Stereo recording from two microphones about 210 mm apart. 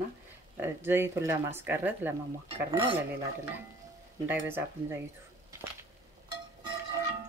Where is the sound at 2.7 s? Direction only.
25° right (ahead or behind).